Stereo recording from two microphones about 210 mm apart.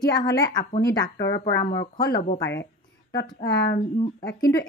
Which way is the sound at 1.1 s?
50° left (ahead or behind).